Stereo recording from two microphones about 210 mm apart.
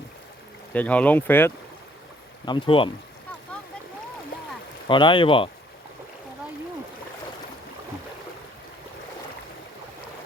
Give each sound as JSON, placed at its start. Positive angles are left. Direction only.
{"t": 0.7, "sound": "speech", "side_deg": 5}
{"t": 2.5, "sound": "speech", "side_deg": 25}
{"t": 4.9, "sound": "speech", "side_deg": 25}